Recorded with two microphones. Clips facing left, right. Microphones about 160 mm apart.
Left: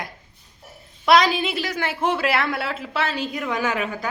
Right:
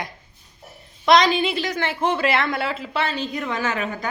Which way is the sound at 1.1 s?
5° left (ahead or behind).